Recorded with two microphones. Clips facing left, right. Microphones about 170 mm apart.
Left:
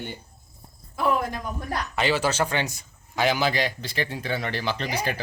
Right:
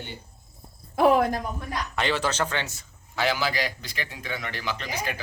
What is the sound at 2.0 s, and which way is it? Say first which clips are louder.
A man's voice: left 2 dB; 5° left (ahead or behind).